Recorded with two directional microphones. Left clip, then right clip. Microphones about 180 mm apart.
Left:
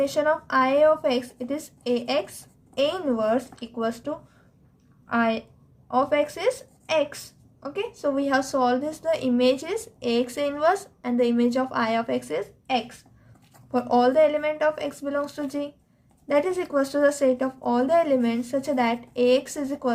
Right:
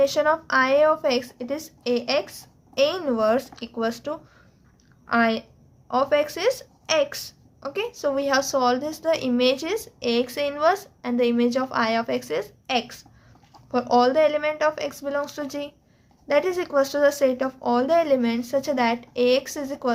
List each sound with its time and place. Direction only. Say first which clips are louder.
0.0 s speech: right 3 dB; 20° right (ahead or behind)